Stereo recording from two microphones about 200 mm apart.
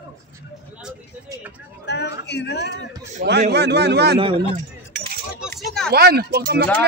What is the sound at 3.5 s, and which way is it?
Speech, 55° right (ahead or behind).